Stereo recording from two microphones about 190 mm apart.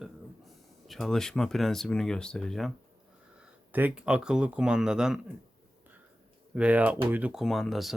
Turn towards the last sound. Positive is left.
turn(degrees=0)  # may be behind; listen again after turning